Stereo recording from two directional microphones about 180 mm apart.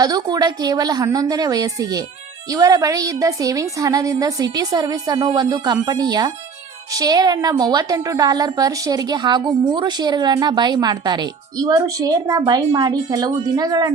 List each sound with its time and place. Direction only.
0.0 s a woman's voice: 20° right (ahead or behind)